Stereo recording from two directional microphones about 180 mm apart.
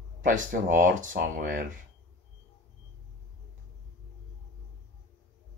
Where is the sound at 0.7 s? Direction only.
45° right (ahead or behind).